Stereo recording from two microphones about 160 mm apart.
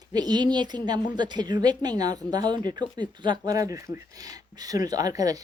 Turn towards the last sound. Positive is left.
turn(degrees=-20)  # may be behind; listen again after turning